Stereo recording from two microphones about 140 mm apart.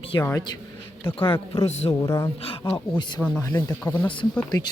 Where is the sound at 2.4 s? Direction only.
40° left (ahead or behind).